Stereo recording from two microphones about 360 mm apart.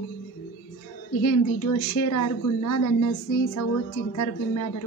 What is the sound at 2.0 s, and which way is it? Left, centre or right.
Speech, left.